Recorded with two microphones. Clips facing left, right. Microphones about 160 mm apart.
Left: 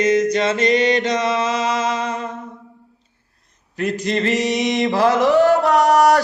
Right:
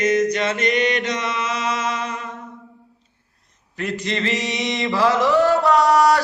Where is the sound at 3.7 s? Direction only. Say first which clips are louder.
Left 4 dB; 45° left (ahead or behind).